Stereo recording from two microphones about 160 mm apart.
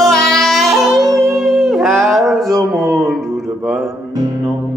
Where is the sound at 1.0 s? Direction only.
20° right (ahead or behind).